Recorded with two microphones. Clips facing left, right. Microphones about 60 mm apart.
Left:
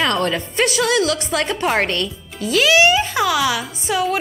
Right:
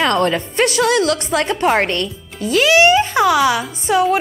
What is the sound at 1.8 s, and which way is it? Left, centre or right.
Speech, centre.